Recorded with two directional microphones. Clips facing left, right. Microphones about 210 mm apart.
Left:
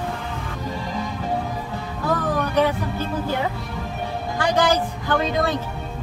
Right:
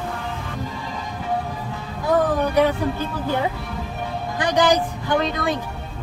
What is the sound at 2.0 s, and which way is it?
Music, 10° right (ahead or behind).